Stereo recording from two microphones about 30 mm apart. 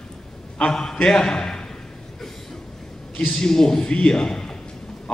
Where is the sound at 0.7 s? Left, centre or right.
Centre.